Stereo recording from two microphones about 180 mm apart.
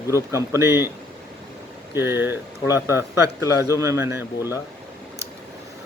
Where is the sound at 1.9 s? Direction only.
15° right (ahead or behind).